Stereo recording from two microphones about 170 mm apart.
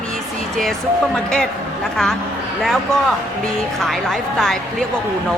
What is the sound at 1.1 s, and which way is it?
Speech, 5° left (ahead or behind).